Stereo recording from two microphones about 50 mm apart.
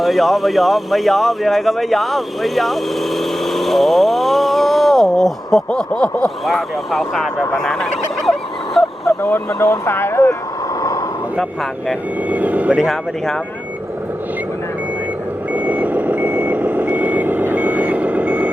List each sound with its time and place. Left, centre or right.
0.0 s speech: centre
5.9 s a sound: left
6.2 s speech: centre
7.5 s fowl: centre
9.5 s speech: left
12.3 s speech: right
12.7 s speech: centre
15.5 s reversing beeps: right